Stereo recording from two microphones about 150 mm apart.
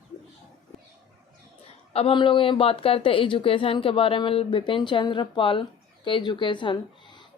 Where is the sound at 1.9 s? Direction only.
40° left (ahead or behind).